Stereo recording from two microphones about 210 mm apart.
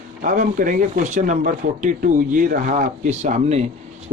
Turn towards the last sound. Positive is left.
turn(degrees=-35)  # may be behind; listen again after turning